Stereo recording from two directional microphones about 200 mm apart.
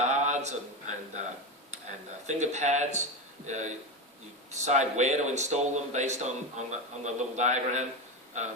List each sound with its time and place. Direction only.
0.1 s speech: 35° right (ahead or behind)
2.2 s speech: 35° right (ahead or behind)